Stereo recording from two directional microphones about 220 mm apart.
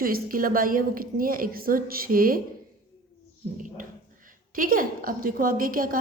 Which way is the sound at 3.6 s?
35° right (ahead or behind).